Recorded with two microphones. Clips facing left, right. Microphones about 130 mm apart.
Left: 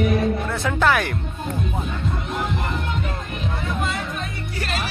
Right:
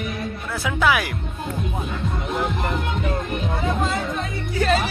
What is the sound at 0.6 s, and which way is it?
Speech, 5° right (ahead or behind).